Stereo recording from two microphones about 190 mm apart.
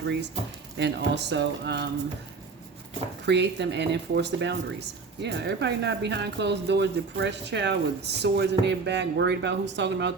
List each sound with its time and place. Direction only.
0.8 s speech: 65° right (ahead or behind)
3.2 s speech: 65° right (ahead or behind)